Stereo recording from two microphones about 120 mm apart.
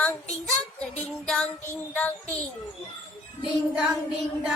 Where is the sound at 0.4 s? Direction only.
5° left (ahead or behind).